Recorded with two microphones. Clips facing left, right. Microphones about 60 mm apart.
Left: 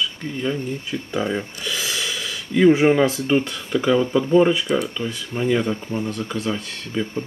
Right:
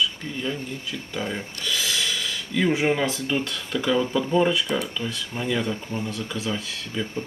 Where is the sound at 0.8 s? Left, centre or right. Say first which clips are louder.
Left 5 dB; left.